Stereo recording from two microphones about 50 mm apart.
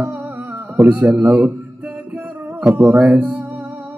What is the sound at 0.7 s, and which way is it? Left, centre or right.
Speech, right.